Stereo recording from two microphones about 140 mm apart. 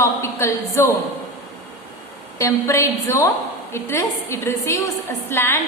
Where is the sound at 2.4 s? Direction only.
20° left (ahead or behind).